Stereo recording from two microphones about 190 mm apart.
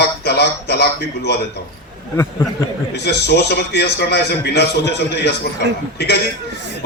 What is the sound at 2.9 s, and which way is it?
A man's voice, 60° left (ahead or behind).